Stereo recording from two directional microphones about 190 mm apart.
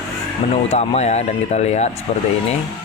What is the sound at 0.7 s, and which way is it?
Speech, 35° left (ahead or behind).